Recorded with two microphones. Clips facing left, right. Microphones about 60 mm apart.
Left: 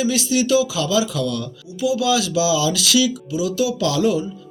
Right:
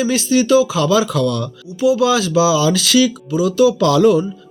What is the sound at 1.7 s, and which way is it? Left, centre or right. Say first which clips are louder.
Speech: right 5 dB; right.